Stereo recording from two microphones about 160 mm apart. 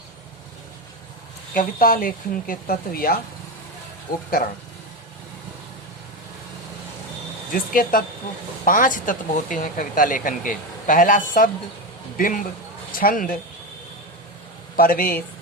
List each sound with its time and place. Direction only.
1.5 s speech: 60° left (ahead or behind)
7.5 s a man's voice: 60° left (ahead or behind)
14.8 s speech: 65° left (ahead or behind)